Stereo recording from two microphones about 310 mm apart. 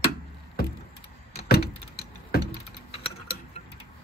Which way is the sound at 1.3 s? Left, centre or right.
Left.